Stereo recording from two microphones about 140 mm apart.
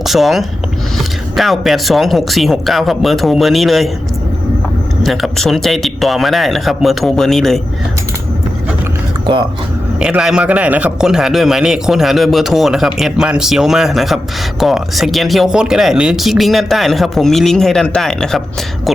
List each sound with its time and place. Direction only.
0.0 s a man's voice: centre (ahead or behind)
5.0 s a man's voice: centre (ahead or behind)
9.2 s speech: 35° right (ahead or behind)
10.0 s a man's voice: 5° right (ahead or behind)